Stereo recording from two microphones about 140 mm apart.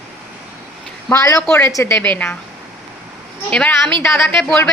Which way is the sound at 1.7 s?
20° left (ahead or behind).